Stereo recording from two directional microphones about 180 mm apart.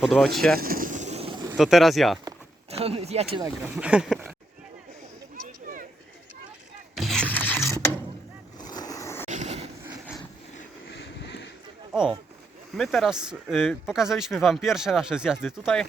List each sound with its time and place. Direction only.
0.0 s speech: centre (ahead or behind)
0.6 s vehicle: 50° right (ahead or behind); by 1.5 s 30° right (ahead or behind)
1.5 s speech: centre (ahead or behind)
2.6 s speech: 35° right (ahead or behind)
3.6 s speech: 5° right (ahead or behind)
5.4 s a sound: 50° right (ahead or behind)
6.9 s a sound: centre (ahead or behind)
8.5 s vehicle: 20° left (ahead or behind)
9.2 s vehicle: 40° right (ahead or behind)
10.8 s vehicle: 85° left
11.9 s a sound: 5° right (ahead or behind)
12.7 s speech: centre (ahead or behind)